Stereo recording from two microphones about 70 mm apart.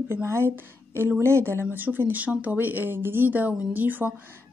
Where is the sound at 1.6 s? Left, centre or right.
Right.